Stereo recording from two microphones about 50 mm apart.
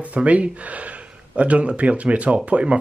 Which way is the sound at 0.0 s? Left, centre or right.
Right.